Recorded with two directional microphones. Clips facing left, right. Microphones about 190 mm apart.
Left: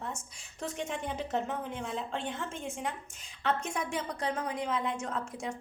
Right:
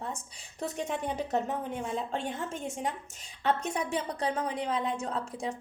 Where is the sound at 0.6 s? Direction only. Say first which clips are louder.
Right 3 dB; 40° right (ahead or behind).